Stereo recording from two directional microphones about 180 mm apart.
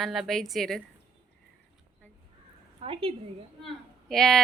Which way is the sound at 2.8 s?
30° right (ahead or behind).